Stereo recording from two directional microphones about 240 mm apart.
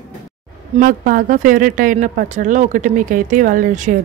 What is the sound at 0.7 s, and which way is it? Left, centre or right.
Speech, right.